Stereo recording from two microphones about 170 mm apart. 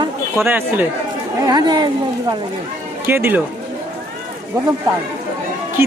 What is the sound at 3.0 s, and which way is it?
Speech, 15° right (ahead or behind).